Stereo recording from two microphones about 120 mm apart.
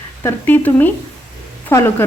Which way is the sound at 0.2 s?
20° left (ahead or behind).